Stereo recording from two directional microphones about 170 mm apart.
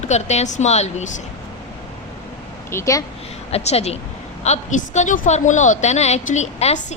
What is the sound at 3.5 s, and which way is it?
A woman's voice, 40° left (ahead or behind).